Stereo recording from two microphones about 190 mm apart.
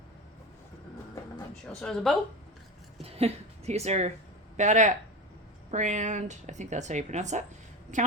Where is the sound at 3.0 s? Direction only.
30° right (ahead or behind).